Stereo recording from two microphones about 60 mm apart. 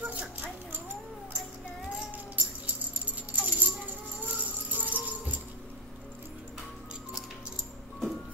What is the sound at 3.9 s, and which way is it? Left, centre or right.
Rattle, right.